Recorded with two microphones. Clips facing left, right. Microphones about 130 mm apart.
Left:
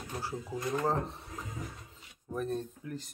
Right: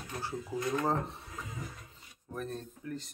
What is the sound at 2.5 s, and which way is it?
Speech, 15° left (ahead or behind).